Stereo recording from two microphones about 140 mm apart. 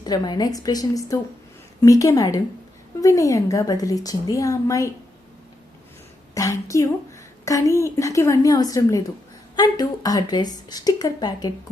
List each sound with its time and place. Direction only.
0.0 s speech: 30° left (ahead or behind)
6.3 s speech: 25° left (ahead or behind)